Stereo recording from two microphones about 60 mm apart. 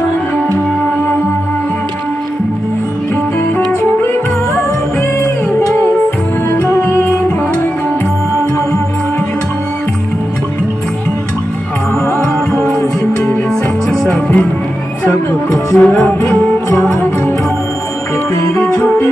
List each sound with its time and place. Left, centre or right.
6.7 s music: left
12.2 s music: centre
14.0 s music: left
15.0 s music: left
15.9 s music: left
18.5 s music: left